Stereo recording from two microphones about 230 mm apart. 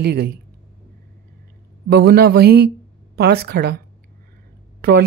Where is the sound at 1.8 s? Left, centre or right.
Right.